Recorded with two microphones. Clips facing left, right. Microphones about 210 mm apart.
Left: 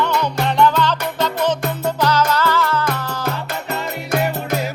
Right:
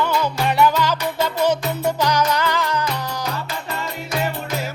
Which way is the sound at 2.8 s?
50° left (ahead or behind).